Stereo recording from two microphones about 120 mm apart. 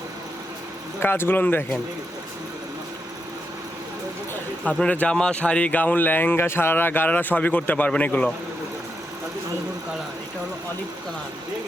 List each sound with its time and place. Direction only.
0.9 s speech: 20° left (ahead or behind)
4.6 s speech: 10° left (ahead or behind)